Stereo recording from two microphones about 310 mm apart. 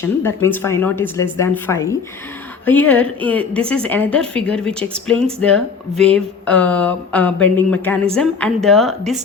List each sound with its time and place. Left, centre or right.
0.4 s a woman's voice: centre